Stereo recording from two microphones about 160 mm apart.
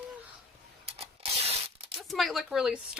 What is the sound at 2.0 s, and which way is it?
Speech, centre (ahead or behind).